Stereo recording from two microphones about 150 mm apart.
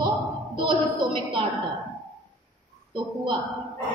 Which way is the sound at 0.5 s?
30° right (ahead or behind).